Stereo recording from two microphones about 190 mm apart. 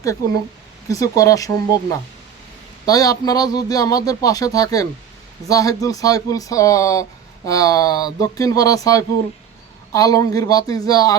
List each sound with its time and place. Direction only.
0.9 s speech: 20° left (ahead or behind)
2.8 s a man's voice: 20° left (ahead or behind)